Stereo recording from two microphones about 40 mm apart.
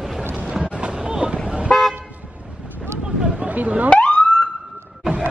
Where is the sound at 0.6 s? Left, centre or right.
Right.